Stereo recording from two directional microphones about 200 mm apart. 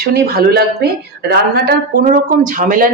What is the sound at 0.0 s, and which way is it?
Speech, 50° right (ahead or behind).